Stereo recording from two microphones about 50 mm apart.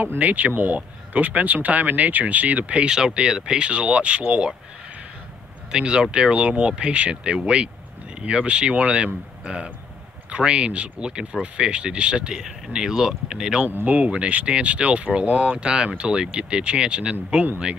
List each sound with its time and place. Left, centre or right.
0.2 s speech: right
5.7 s speech: centre
13.8 s speech: right